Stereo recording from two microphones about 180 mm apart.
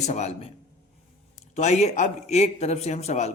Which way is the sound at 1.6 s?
40° left (ahead or behind).